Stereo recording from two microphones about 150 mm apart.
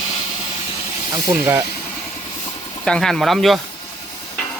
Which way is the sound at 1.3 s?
15° right (ahead or behind).